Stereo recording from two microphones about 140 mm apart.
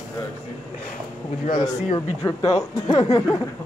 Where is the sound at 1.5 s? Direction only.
30° left (ahead or behind).